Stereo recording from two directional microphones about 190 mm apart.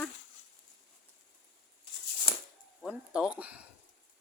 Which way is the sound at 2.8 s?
5° right (ahead or behind).